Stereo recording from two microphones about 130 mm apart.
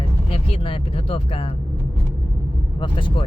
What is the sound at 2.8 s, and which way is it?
Speech, 40° left (ahead or behind).